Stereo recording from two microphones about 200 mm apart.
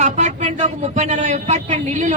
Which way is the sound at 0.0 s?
35° right (ahead or behind).